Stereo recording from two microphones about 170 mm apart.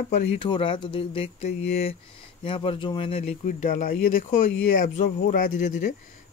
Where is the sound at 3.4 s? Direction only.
50° left (ahead or behind).